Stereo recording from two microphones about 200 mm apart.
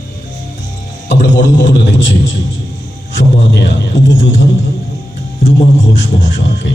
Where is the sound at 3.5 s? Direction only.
65° left (ahead or behind).